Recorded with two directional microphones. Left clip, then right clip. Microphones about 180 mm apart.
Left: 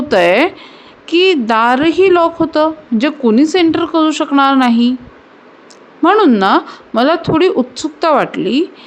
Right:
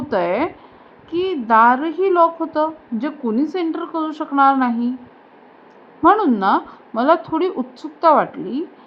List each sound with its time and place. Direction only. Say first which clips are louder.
0.1 s a woman's voice: left 9 dB; 45° left (ahead or behind)
6.0 s speech: left 5 dB; 45° left (ahead or behind)